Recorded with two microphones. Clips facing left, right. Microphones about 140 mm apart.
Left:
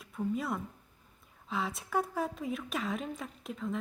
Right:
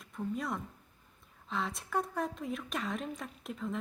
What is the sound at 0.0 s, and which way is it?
A woman's voice, 5° left (ahead or behind).